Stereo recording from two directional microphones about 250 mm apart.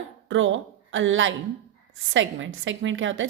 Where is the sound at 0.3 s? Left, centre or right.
Right.